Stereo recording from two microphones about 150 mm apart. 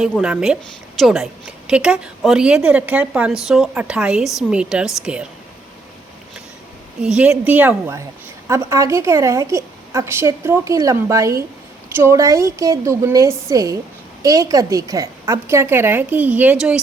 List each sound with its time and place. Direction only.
0.2 s a woman's voice: 5° right (ahead or behind)
7.0 s a woman's voice: 5° right (ahead or behind)